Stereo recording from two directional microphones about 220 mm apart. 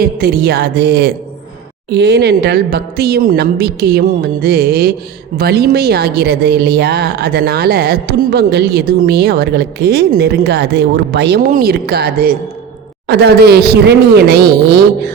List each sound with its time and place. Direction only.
0.0 s a woman's voice: 45° right (ahead or behind)